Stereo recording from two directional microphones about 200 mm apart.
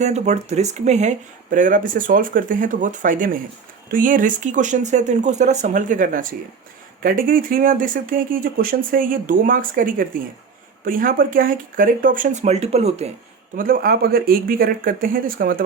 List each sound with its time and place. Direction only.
0.0 s speech: 35° right (ahead or behind)
13.6 s speech: 45° right (ahead or behind)